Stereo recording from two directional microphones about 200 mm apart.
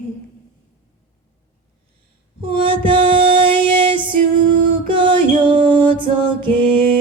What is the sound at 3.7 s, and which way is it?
Music, 25° right (ahead or behind).